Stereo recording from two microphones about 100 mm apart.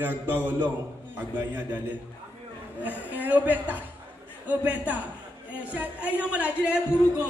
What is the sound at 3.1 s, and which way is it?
A man's voice, 15° right (ahead or behind).